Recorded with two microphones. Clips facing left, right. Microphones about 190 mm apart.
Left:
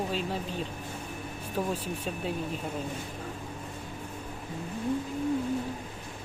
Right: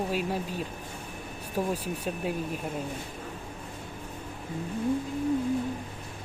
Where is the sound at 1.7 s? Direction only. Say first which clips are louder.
Right 2 dB; 10° right (ahead or behind).